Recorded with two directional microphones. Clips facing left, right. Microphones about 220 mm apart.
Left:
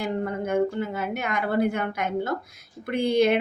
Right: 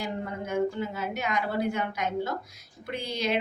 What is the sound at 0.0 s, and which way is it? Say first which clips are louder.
A woman's voice: left 6 dB; 55° left (ahead or behind).